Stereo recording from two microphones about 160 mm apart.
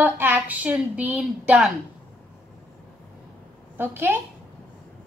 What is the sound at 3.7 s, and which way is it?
Speech, 15° right (ahead or behind).